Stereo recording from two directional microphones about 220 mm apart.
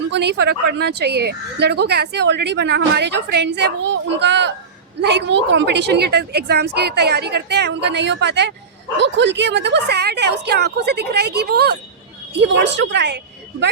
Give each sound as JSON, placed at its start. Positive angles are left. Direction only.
{"t": 0.1, "sound": "speech", "side_deg": -50}